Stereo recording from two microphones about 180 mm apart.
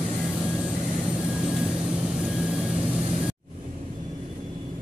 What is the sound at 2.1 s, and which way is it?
Vehicle, centre (ahead or behind).